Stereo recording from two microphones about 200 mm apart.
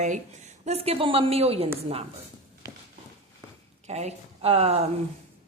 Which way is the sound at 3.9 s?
35° right (ahead or behind).